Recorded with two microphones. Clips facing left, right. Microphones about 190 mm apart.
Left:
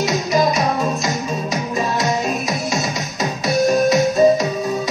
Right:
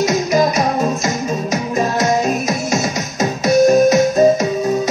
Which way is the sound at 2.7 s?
45° right (ahead or behind).